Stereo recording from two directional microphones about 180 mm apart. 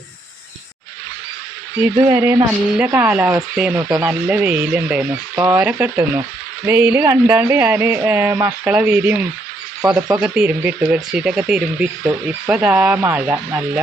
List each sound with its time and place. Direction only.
1.8 s speech: 10° right (ahead or behind)
9.8 s speech: 20° right (ahead or behind)
10.2 s speech: 5° right (ahead or behind)